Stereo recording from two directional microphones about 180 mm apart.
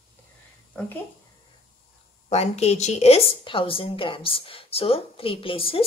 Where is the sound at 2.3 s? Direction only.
35° left (ahead or behind).